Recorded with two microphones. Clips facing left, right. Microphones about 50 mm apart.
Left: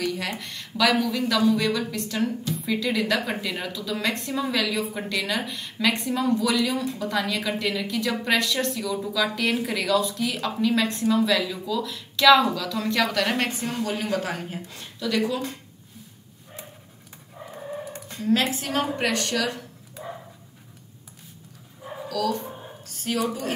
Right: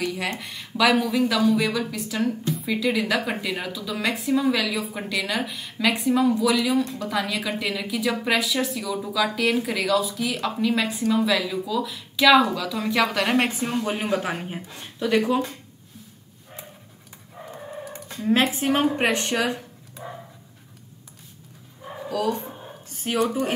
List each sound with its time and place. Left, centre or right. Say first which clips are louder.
0.0 s a woman's voice: right 1 dB; centre; by 15.5 s right
17.5 s dog: left 2 dB; centre
18.5 s speech: right 5 dB; right
22.0 s a sound: right 1 dB; right
23.2 s speech: right 4 dB; right